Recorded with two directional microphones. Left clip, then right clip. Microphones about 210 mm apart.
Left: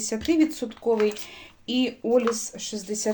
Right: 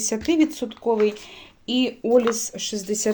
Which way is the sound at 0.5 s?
25° right (ahead or behind).